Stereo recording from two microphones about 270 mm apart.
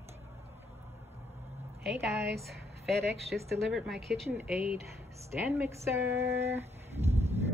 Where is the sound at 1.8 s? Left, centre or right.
Centre.